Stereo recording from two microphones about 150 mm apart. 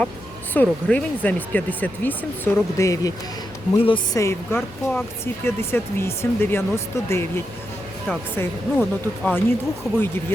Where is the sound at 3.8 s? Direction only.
30° left (ahead or behind).